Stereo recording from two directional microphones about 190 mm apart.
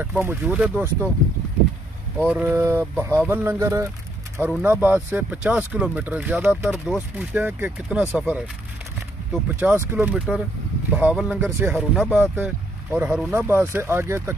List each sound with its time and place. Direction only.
0.0 s speech: 10° right (ahead or behind)
2.1 s speech: 5° right (ahead or behind)